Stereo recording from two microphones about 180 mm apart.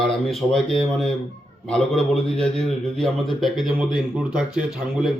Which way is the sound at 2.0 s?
35° left (ahead or behind).